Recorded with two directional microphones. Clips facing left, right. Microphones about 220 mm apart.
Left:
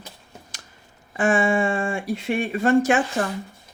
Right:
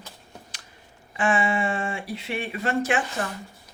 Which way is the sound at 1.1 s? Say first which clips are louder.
Left 4 dB; 45° left (ahead or behind).